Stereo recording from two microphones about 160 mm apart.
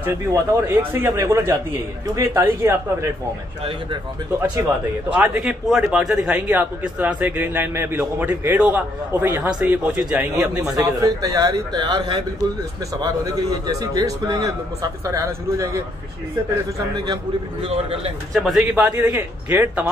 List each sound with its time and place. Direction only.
0.0 s a man's voice: 20° right (ahead or behind)
5.1 s a man's voice: 10° right (ahead or behind)
10.3 s a man's voice: 20° right (ahead or behind)
16.9 s a man's voice: 25° right (ahead or behind)
18.3 s speech: centre (ahead or behind)
18.9 s a man's voice: 15° right (ahead or behind)